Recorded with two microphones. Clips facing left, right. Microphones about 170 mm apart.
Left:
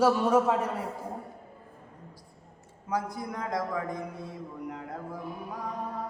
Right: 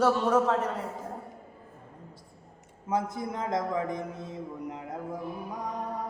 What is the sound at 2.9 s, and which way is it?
A man's voice, 25° right (ahead or behind).